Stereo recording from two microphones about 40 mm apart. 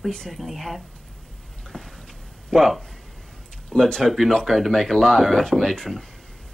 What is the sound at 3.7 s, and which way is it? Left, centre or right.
Speech, centre.